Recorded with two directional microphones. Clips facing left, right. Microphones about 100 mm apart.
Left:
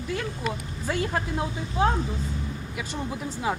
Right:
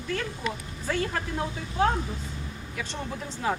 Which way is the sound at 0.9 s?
15° left (ahead or behind).